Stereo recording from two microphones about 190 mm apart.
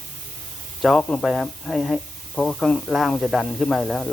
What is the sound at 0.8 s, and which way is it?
Speech, 5° left (ahead or behind).